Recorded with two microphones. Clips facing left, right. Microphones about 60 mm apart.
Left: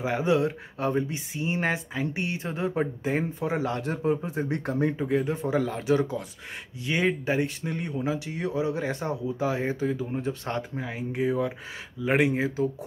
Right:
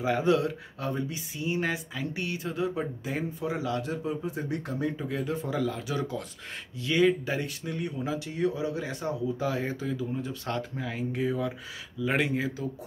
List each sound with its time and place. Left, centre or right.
0.0 s speech: left
9.4 s speech: left
10.9 s speech: centre